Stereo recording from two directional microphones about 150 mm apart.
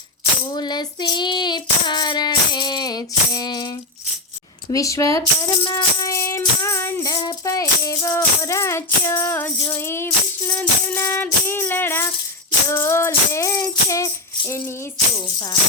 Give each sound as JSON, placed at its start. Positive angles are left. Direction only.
{"t": 0.5, "sound": "child singing", "side_deg": 30}
{"t": 4.7, "sound": "speech", "side_deg": 20}
{"t": 9.7, "sound": "music", "side_deg": 15}